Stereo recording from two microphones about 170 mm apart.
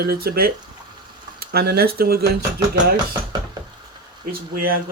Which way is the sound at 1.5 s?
65° right (ahead or behind).